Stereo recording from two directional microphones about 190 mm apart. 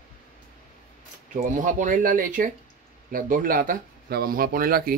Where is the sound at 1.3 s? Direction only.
40° right (ahead or behind).